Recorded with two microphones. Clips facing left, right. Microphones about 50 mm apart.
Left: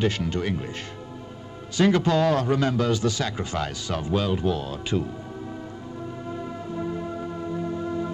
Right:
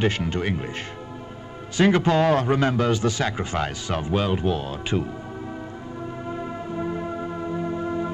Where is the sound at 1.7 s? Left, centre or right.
Right.